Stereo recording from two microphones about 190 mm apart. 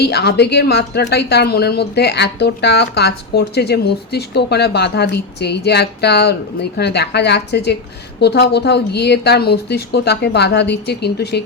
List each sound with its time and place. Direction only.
0.0 s a woman's voice: 60° left (ahead or behind)